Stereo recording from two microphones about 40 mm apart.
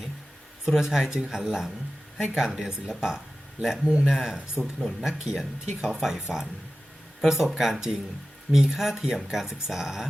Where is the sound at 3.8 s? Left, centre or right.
Right.